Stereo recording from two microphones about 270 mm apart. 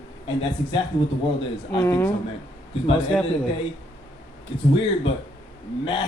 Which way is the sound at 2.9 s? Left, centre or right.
Centre.